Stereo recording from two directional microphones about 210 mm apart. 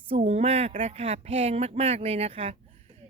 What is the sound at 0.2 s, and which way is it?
Speech, 30° right (ahead or behind).